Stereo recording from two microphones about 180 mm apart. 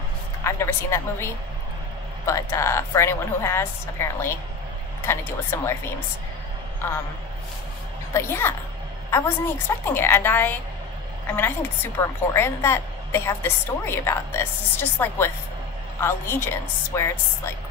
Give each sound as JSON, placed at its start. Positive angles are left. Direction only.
{"t": 0.4, "sound": "a woman's voice", "side_deg": 15}
{"t": 8.1, "sound": "a woman's voice", "side_deg": 15}